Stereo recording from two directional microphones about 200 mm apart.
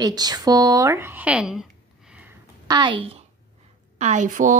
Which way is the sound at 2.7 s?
25° right (ahead or behind).